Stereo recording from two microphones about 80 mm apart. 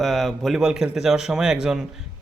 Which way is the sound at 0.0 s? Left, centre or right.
Centre.